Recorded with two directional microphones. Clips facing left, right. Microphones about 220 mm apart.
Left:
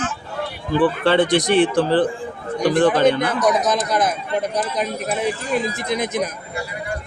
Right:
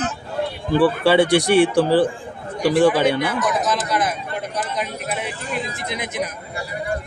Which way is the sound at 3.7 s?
40° left (ahead or behind).